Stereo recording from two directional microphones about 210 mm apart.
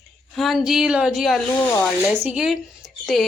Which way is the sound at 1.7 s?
10° left (ahead or behind).